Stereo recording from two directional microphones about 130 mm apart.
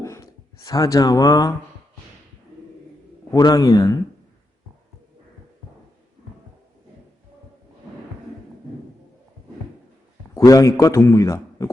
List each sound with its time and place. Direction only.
0.0 s speech: 25° left (ahead or behind)
3.3 s a man's voice: 25° left (ahead or behind)
10.3 s a man's voice: 25° left (ahead or behind)